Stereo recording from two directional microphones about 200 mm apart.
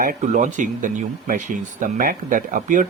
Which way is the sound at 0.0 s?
40° right (ahead or behind).